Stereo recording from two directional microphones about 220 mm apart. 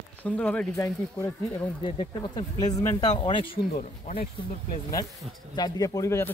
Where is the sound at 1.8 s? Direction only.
25° left (ahead or behind).